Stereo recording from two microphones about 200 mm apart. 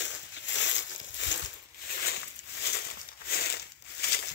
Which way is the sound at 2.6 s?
55° left (ahead or behind).